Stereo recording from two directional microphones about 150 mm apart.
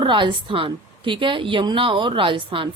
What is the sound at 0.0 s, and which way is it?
A woman's voice, 35° right (ahead or behind).